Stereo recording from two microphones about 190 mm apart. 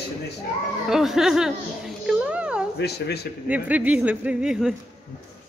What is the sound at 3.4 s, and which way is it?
Speech, 10° right (ahead or behind).